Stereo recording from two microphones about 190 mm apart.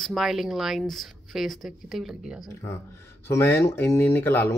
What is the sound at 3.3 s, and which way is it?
Speech, 15° left (ahead or behind).